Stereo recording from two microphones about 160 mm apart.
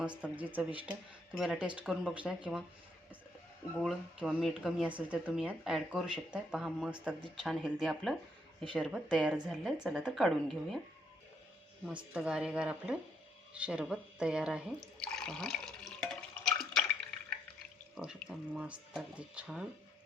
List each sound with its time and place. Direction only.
0.0 s speech: 5° right (ahead or behind)
3.8 s speech: 5° right (ahead or behind)
11.9 s speech: 5° right (ahead or behind)
13.5 s drip: 5° right (ahead or behind)
17.9 s speech: 5° right (ahead or behind)